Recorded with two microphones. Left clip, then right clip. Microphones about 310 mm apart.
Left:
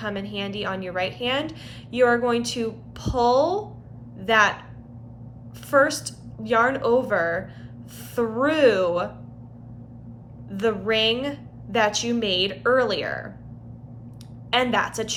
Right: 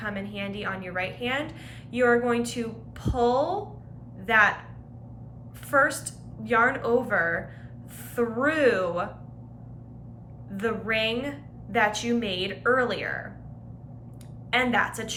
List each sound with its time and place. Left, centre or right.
0.0 s a woman's voice: centre
5.7 s a woman's voice: centre
10.5 s a woman's voice: centre
14.5 s a woman's voice: centre